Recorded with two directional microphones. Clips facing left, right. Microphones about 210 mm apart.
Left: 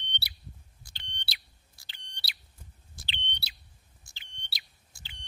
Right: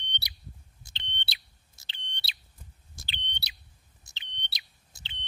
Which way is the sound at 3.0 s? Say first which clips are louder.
Left 1 dB; 45° right (ahead or behind).